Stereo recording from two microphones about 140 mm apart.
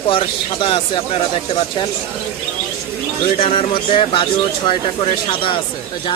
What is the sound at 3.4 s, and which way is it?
Speech, 40° left (ahead or behind).